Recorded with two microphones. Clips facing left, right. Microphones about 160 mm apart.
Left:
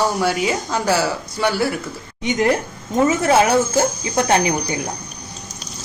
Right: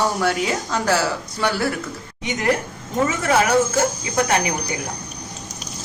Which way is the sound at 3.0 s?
25° left (ahead or behind).